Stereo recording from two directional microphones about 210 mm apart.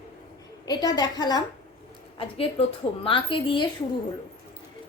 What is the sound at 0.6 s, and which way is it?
A woman's voice, 20° left (ahead or behind).